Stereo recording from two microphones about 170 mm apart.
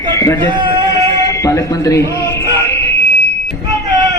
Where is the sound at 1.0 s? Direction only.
20° left (ahead or behind).